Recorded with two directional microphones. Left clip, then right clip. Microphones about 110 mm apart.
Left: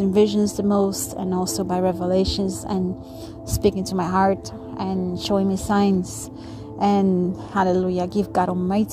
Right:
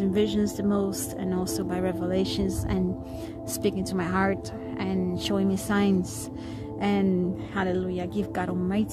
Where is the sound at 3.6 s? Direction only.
25° left (ahead or behind).